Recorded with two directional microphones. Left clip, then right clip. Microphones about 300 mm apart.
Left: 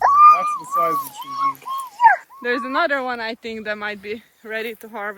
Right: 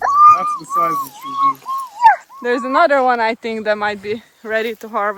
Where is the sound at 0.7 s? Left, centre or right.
Centre.